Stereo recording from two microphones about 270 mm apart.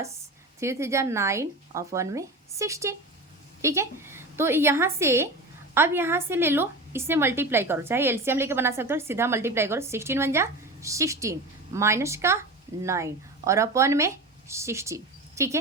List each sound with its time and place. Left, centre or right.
0.6 s a woman's voice: centre